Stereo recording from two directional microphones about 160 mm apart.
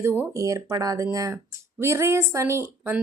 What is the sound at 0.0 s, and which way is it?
Speech, 15° right (ahead or behind).